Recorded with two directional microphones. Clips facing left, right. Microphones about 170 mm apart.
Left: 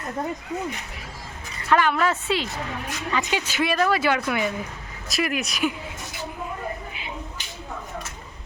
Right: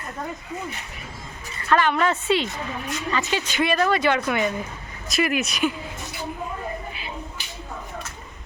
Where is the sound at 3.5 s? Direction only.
Centre (ahead or behind).